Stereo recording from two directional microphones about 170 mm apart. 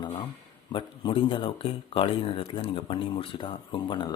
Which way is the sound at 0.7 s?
30° left (ahead or behind).